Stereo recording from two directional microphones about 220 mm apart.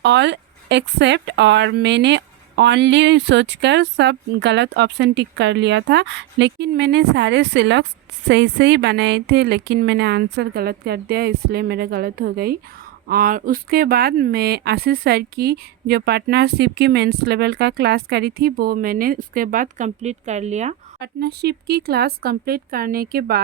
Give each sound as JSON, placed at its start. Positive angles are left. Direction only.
{"t": 0.0, "sound": "a woman's voice", "side_deg": -50}
{"t": 21.0, "sound": "a woman's voice", "side_deg": -45}